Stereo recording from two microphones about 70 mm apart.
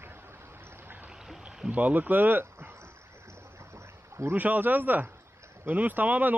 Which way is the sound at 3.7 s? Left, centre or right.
Right.